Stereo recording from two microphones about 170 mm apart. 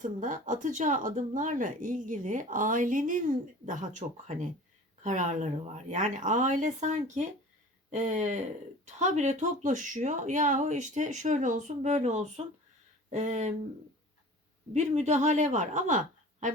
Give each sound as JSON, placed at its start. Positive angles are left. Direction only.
{"t": 0.0, "sound": "speech", "side_deg": -50}
{"t": 14.7, "sound": "speech", "side_deg": -45}